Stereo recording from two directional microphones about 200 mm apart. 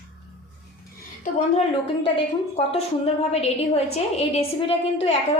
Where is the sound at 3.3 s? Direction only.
30° left (ahead or behind).